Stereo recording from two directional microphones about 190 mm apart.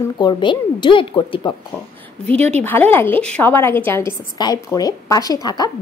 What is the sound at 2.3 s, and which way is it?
Speech, 35° right (ahead or behind).